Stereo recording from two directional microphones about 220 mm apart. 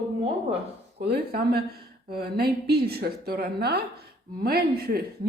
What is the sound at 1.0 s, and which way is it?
A woman's voice, 45° right (ahead or behind).